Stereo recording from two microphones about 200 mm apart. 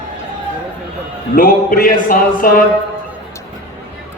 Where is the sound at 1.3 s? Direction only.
45° left (ahead or behind).